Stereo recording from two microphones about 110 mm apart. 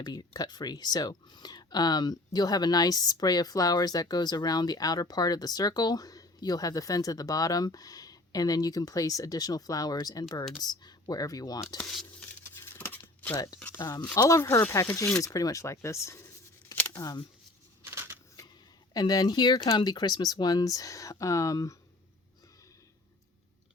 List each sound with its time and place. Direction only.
0.0 s speech: 40° left (ahead or behind)
11.8 s speech: 5° left (ahead or behind)
12.7 s a sound: 15° left (ahead or behind)
13.3 s speech: 35° left (ahead or behind)
13.6 s speech: 15° left (ahead or behind)
14.2 s speech: 30° left (ahead or behind)
17.0 s speech: 35° left (ahead or behind)
17.8 s a sound: 20° right (ahead or behind)
18.9 s speech: 35° left (ahead or behind)